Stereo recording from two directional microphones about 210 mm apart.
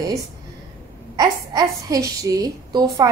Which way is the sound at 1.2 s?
20° right (ahead or behind).